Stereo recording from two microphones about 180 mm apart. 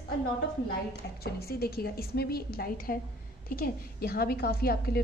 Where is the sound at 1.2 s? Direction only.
60° left (ahead or behind).